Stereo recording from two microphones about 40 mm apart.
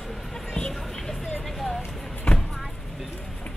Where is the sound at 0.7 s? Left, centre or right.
Centre.